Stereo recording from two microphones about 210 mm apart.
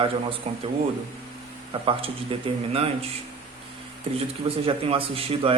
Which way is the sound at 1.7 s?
25° right (ahead or behind).